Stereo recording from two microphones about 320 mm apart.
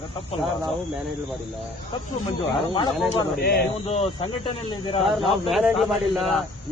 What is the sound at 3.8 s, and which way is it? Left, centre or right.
Speech, centre.